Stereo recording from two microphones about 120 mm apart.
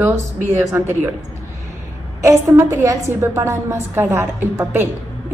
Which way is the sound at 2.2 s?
25° right (ahead or behind).